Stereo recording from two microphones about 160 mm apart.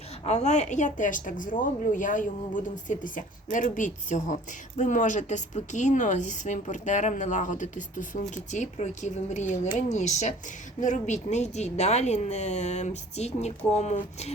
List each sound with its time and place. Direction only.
0.3 s a woman's voice: 45° left (ahead or behind)